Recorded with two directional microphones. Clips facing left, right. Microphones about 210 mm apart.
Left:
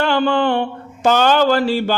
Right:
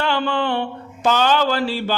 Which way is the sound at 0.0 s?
45° left (ahead or behind).